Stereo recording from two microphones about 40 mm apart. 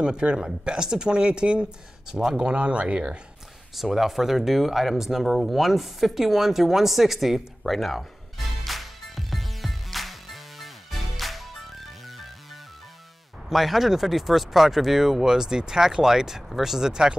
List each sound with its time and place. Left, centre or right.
0.0 s speech: right
2.0 s speech: centre
2.3 s speech: right
3.7 s speech: centre
8.6 s music: centre
13.5 s speech: centre